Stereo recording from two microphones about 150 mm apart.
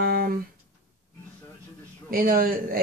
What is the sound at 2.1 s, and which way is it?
Speech, 75° right (ahead or behind).